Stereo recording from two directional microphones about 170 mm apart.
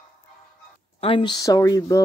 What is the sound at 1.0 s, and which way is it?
Speech, 30° left (ahead or behind).